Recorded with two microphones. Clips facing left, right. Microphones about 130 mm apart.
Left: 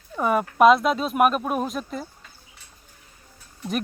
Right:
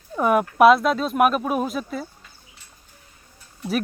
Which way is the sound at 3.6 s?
5° right (ahead or behind).